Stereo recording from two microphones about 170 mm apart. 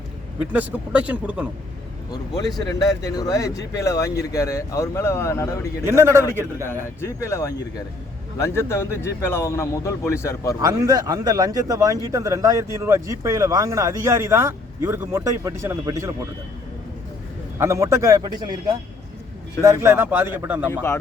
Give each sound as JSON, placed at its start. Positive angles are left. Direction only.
{"t": 0.3, "sound": "speech", "side_deg": -10}
{"t": 2.6, "sound": "speech", "side_deg": 20}
{"t": 5.9, "sound": "speech", "side_deg": -15}
{"t": 6.7, "sound": "a man's voice", "side_deg": 15}
{"t": 10.6, "sound": "a man's voice", "side_deg": -20}
{"t": 17.6, "sound": "a man's voice", "side_deg": -15}
{"t": 19.6, "sound": "speech", "side_deg": -15}